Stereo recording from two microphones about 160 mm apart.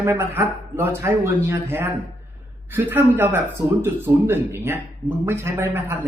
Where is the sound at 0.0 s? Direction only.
15° right (ahead or behind).